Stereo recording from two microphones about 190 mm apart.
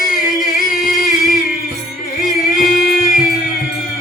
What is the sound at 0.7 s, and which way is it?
Singing, 50° left (ahead or behind).